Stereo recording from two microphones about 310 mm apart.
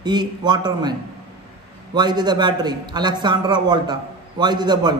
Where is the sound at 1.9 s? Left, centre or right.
Centre.